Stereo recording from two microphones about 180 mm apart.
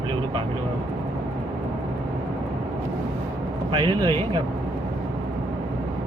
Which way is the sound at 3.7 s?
25° right (ahead or behind).